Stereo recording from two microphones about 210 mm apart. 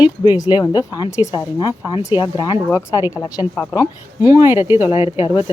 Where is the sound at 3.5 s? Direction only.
5° right (ahead or behind).